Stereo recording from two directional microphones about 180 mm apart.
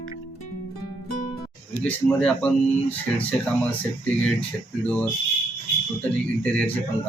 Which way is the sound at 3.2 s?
10° left (ahead or behind).